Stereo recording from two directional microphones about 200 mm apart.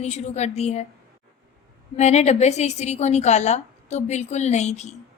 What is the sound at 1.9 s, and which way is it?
A woman's voice, 35° left (ahead or behind).